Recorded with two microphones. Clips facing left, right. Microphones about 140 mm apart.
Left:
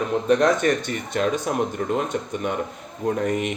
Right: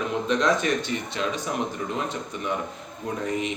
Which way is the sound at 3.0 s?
55° left (ahead or behind).